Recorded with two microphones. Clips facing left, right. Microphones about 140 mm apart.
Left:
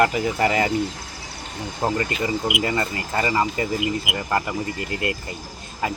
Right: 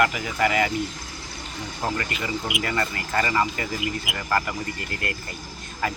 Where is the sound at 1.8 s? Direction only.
30° left (ahead or behind).